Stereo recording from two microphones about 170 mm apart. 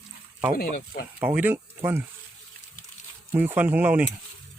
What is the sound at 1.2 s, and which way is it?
Speech, 10° right (ahead or behind).